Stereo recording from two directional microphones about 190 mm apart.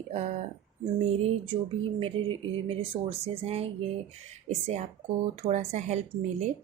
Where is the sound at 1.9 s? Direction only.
30° right (ahead or behind).